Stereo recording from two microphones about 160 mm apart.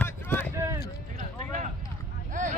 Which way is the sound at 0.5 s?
15° right (ahead or behind).